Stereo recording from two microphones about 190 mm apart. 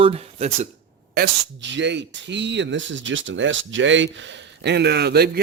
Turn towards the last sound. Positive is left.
turn(degrees=-55)  # may be behind; listen again after turning